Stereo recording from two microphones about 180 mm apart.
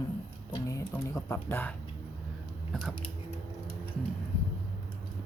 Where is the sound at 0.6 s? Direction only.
15° left (ahead or behind).